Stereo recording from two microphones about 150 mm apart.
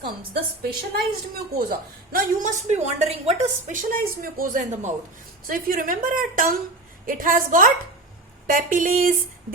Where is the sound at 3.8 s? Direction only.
65° right (ahead or behind).